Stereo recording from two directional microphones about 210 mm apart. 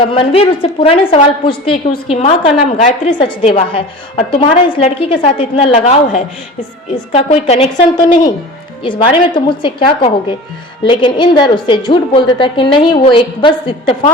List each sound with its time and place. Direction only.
0.0 s a woman's voice: 25° left (ahead or behind)
8.8 s a woman's voice: 25° left (ahead or behind)